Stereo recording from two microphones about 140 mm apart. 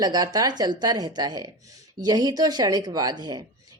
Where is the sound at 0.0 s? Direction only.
25° right (ahead or behind).